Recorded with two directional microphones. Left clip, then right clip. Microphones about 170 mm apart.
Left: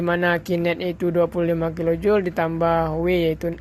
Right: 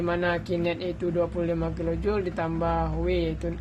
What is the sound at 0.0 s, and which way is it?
Speech, 45° left (ahead or behind).